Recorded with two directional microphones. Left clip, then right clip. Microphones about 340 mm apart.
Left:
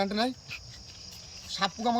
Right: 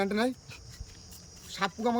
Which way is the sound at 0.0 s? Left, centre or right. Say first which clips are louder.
Even; centre.